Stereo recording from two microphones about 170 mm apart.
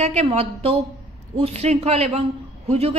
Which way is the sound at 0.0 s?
40° right (ahead or behind).